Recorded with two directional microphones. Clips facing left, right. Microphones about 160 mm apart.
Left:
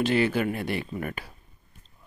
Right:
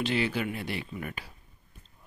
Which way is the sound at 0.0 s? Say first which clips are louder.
Left 5 dB; 50° left (ahead or behind).